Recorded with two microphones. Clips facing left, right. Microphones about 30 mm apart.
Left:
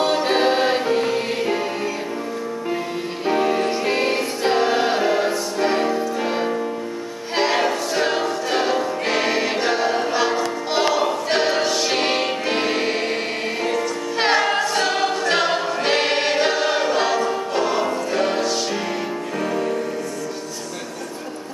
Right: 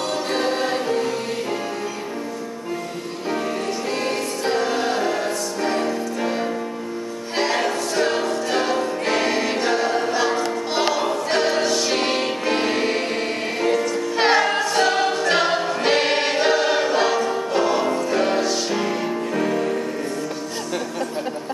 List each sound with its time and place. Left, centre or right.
0.0 s music: left
3.3 s music: left; by 19.8 s centre